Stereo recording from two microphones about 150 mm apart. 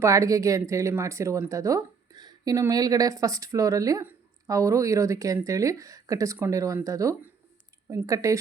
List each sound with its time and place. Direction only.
0.0 s speech: 20° right (ahead or behind)